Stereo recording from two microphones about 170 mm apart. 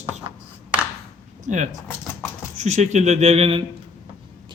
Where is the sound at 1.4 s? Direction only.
45° right (ahead or behind).